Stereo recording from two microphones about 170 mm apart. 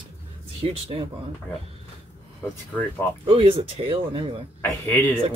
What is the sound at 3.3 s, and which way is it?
Speech, 30° right (ahead or behind).